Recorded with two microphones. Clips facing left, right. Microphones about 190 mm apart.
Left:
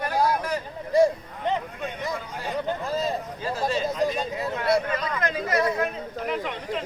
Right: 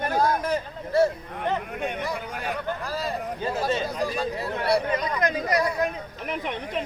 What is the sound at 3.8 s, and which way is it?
Speech, 20° left (ahead or behind).